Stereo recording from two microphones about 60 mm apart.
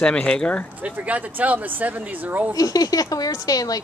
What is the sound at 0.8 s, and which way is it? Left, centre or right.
Speech, right.